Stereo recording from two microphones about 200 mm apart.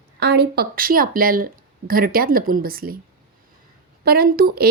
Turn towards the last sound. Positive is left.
turn(degrees=-50)  # may be behind; listen again after turning